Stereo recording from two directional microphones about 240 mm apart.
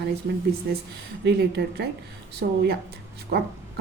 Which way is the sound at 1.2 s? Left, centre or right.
Right.